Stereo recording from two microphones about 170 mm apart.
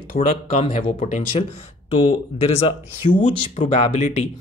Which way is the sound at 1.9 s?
30° left (ahead or behind).